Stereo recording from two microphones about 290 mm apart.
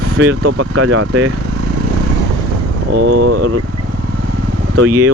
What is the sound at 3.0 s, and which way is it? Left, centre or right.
Speech, right.